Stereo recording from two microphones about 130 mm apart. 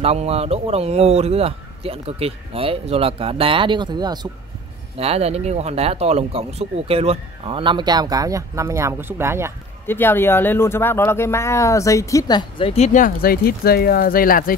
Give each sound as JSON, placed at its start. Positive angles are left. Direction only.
{"t": 0.0, "sound": "speech", "side_deg": -50}
{"t": 4.9, "sound": "speech", "side_deg": -50}
{"t": 9.8, "sound": "speech", "side_deg": 15}
{"t": 14.1, "sound": "speech", "side_deg": 90}